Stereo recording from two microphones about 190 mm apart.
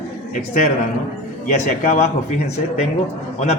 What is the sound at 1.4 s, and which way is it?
Speech, 45° left (ahead or behind).